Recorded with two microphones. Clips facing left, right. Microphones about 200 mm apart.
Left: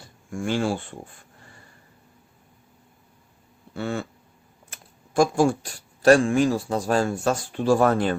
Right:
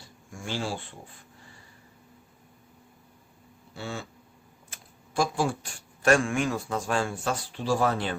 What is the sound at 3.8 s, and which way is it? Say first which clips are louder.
Speech: left 8 dB; 55° left (ahead or behind).